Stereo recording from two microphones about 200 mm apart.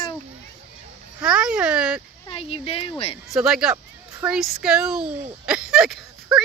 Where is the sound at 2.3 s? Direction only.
30° left (ahead or behind).